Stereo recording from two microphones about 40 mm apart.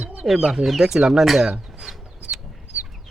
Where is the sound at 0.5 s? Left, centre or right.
Centre.